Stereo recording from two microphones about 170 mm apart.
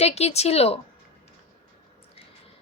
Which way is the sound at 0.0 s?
40° left (ahead or behind).